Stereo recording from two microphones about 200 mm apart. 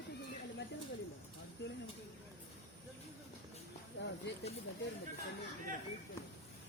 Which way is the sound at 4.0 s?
65° left (ahead or behind).